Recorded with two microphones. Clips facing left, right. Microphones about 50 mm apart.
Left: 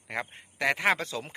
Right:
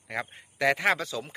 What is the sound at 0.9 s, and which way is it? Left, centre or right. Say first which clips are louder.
Speech: right 1 dB; left.